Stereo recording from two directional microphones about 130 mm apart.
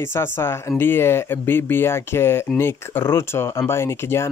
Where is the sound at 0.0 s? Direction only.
20° left (ahead or behind).